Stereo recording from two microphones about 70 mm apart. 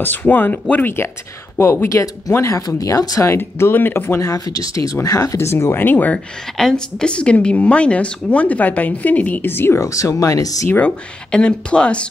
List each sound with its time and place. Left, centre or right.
0.0 s a woman's voice: left
1.6 s speech: left
2.8 s speech: left
3.3 s speech: left
4.2 s speech: left
5.5 s a woman's voice: left
6.1 s a woman's voice: centre; by 9.8 s left
9.8 s speech: left
11.3 s speech: centre